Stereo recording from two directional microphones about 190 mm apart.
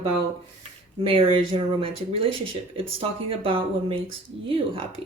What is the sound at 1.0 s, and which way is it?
Speech, 30° right (ahead or behind).